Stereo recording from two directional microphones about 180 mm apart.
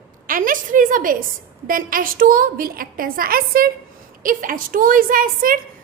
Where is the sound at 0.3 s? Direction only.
50° right (ahead or behind).